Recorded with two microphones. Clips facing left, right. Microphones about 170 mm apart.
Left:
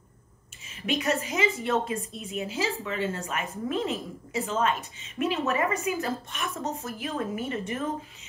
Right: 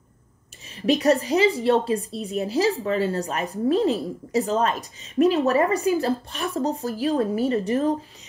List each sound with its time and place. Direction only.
0.8 s a woman's voice: 35° right (ahead or behind)